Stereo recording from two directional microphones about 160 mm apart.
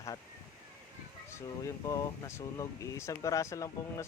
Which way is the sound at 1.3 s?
20° left (ahead or behind).